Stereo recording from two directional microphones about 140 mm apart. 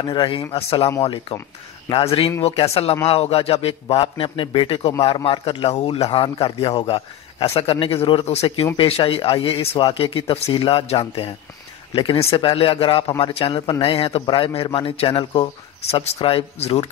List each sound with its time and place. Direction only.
0.0 s a man's voice: 35° left (ahead or behind)
1.9 s a man's voice: 35° left (ahead or behind)